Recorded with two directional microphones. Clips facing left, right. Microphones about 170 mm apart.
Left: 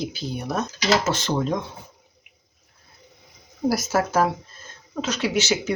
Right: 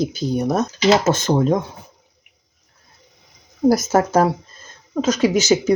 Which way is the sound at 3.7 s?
45° right (ahead or behind).